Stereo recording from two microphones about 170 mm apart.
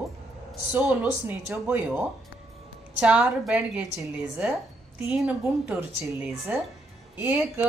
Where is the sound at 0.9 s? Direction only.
10° right (ahead or behind).